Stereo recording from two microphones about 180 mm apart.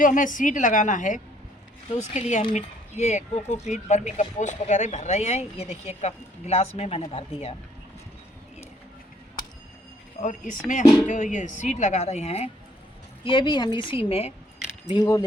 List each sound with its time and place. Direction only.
0.0 s speech: 45° left (ahead or behind)
10.2 s a woman's voice: 45° left (ahead or behind)
14.9 s a woman's voice: 25° left (ahead or behind)